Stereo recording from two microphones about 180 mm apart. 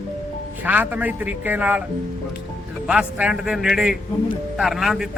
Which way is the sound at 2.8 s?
5° right (ahead or behind).